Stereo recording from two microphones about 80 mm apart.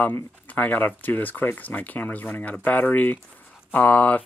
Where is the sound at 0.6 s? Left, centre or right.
Left.